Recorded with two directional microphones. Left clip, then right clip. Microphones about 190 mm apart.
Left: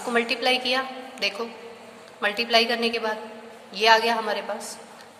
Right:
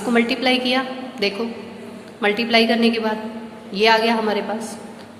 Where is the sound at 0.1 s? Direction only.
25° left (ahead or behind).